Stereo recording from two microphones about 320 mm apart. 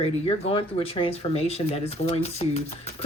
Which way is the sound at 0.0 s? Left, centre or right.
Centre.